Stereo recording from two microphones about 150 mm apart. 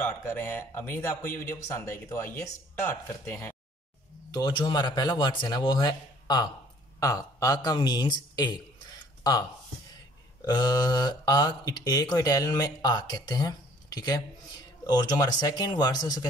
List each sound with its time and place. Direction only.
0.0 s speech: 15° left (ahead or behind)
4.3 s speech: 30° left (ahead or behind)
9.3 s speech: 25° left (ahead or behind)